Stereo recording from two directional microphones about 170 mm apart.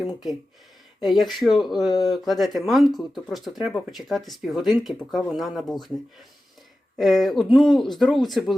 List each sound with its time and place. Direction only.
0.0 s speech: centre (ahead or behind)
1.9 s speech: 25° left (ahead or behind)
2.1 s speech: centre (ahead or behind)
6.9 s speech: centre (ahead or behind)